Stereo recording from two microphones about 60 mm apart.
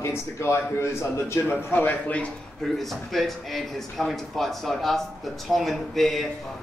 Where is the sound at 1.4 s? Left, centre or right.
Left.